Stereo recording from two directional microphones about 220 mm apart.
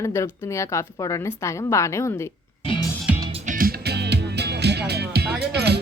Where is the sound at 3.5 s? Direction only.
40° right (ahead or behind).